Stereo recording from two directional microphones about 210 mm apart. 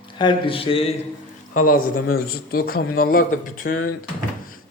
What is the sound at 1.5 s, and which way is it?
A man's voice, 45° left (ahead or behind).